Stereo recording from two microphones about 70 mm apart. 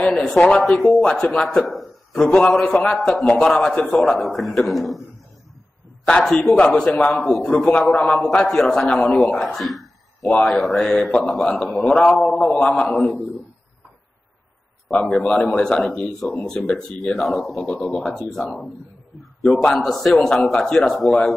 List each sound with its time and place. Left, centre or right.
0.0 s speech: centre
0.4 s a man's voice: centre
2.1 s a man's voice: centre
4.0 s speech: centre
6.2 s speech: centre
6.5 s a man's voice: centre
10.2 s a man's voice: centre
11.4 s a man's voice: centre
14.9 s a man's voice: centre
19.8 s speech: centre